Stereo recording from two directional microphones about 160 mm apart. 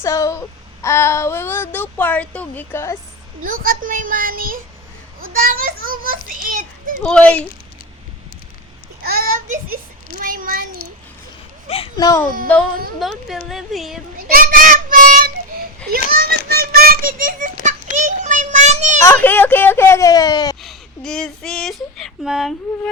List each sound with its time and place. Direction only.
0.0 s a child's voice: 20° left (ahead or behind)
3.4 s a child's voice: 60° right (ahead or behind)
7.0 s a child's voice: 5° left (ahead or behind)
9.0 s a child's voice: 65° right (ahead or behind)
11.9 s a child's voice: 25° left (ahead or behind)
13.0 s speech: centre (ahead or behind)
14.3 s a child's voice: 65° right (ahead or behind)
16.1 s a sound: 70° right (ahead or behind); by 19.0 s 50° right (ahead or behind)
19.0 s a child's voice: 10° left (ahead or behind)
20.6 s speech: centre (ahead or behind)